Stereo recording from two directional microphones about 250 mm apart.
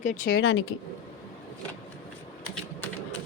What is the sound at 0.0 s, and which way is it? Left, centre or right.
Speech, left.